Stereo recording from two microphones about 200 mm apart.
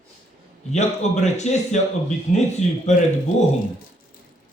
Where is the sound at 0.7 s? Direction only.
35° left (ahead or behind).